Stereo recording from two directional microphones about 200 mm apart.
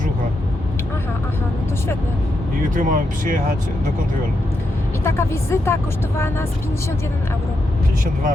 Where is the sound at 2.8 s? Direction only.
40° right (ahead or behind).